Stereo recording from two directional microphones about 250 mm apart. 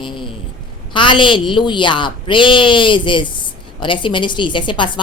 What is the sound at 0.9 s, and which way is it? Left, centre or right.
A woman's voice, centre.